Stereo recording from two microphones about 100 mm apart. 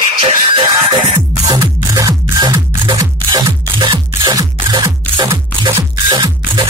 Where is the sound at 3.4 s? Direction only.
55° right (ahead or behind).